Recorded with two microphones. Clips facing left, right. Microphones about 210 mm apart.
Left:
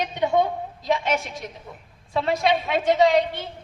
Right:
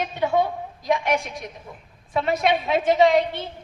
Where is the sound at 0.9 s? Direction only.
25° left (ahead or behind).